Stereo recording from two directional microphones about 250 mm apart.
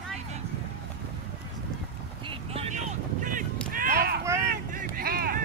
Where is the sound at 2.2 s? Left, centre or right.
Right.